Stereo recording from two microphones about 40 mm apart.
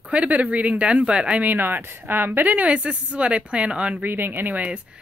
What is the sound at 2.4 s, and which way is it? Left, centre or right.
Speech, right.